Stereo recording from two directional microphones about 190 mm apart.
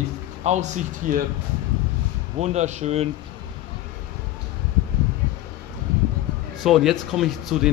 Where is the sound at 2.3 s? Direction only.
35° right (ahead or behind).